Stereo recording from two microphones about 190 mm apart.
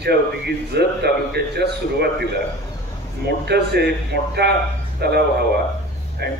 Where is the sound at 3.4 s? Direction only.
60° right (ahead or behind).